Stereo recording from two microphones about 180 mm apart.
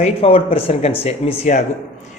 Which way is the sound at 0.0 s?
30° left (ahead or behind).